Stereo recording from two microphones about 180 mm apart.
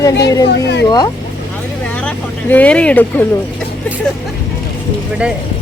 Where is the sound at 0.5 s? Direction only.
65° left (ahead or behind).